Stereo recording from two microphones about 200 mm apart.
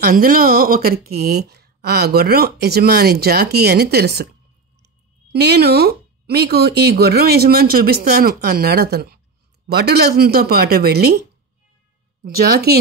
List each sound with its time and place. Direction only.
0.0 s speech: 50° right (ahead or behind)
12.2 s speech: 50° right (ahead or behind)